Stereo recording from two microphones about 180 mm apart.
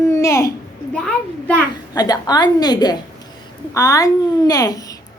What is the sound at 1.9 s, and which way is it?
A child's voice, 20° left (ahead or behind).